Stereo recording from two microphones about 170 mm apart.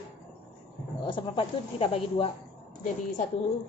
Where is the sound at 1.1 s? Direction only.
30° left (ahead or behind).